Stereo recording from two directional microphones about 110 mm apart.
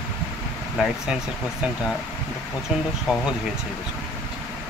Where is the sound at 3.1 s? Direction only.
5° right (ahead or behind).